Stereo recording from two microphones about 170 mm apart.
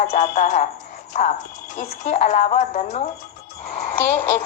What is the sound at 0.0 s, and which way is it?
Speech, 50° left (ahead or behind).